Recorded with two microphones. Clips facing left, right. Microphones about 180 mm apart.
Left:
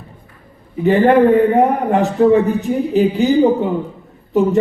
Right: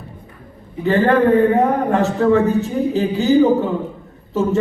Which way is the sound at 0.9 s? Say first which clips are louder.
Left 3 dB; 15° left (ahead or behind).